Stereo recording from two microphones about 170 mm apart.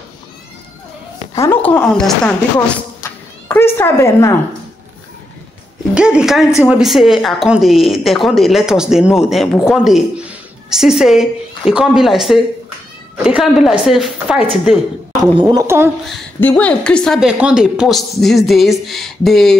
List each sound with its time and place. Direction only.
1.4 s a woman's voice: 10° left (ahead or behind)
3.0 s a sound: 15° left (ahead or behind)
5.9 s a woman's voice: 5° right (ahead or behind)
15.4 s speech: 15° right (ahead or behind)
16.3 s a woman's voice: 10° left (ahead or behind)